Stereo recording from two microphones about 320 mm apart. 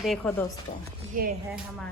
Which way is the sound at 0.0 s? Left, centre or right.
Centre.